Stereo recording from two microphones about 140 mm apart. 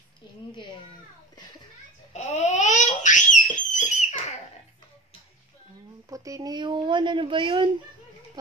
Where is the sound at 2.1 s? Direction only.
55° left (ahead or behind).